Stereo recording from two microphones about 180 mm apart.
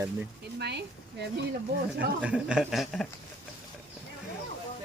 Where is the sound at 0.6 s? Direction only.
70° right (ahead or behind).